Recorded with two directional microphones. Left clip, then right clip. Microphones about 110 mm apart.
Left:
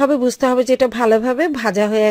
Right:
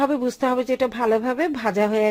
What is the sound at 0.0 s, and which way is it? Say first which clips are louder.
Speech: left 6 dB; 30° left (ahead or behind).